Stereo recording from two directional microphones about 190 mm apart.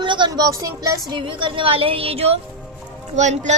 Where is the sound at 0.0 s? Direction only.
25° right (ahead or behind).